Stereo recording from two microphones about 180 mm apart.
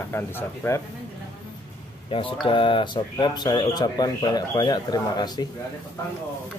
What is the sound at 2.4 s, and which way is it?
Speech, 30° left (ahead or behind).